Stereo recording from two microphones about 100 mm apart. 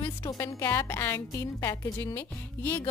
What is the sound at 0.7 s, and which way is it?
Music, 20° left (ahead or behind).